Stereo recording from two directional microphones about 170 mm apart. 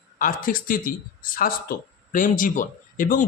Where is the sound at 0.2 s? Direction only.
55° left (ahead or behind).